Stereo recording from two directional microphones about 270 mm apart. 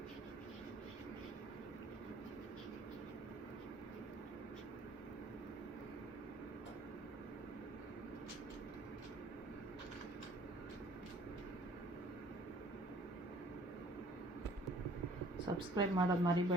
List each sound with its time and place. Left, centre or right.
15.5 s speech: centre